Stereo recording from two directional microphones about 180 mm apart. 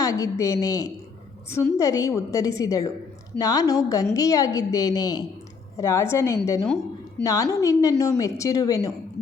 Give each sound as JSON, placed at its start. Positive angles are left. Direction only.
{"t": 0.0, "sound": "a woman's voice", "side_deg": 20}